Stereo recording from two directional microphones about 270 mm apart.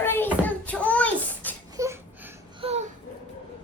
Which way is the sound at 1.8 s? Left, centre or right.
Centre.